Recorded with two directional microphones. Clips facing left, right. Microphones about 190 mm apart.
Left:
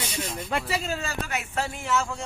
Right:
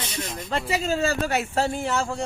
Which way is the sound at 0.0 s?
10° left (ahead or behind).